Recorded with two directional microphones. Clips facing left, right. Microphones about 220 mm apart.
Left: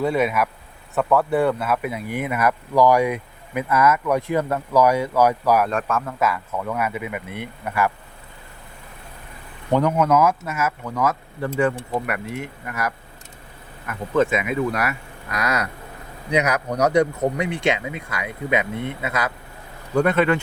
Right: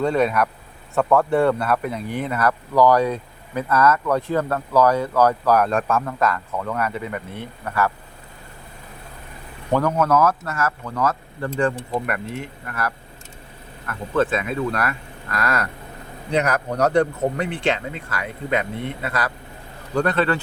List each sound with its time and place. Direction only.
0.0 s speech: 5° left (ahead or behind)
9.7 s speech: 15° left (ahead or behind)
16.7 s speech: 10° left (ahead or behind)